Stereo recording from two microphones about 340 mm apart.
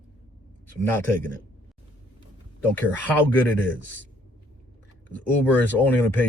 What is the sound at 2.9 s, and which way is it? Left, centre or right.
Speech, centre.